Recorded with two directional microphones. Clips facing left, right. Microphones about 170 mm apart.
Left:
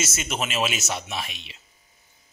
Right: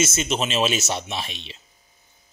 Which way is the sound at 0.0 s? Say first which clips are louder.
Right 6 dB; 25° right (ahead or behind).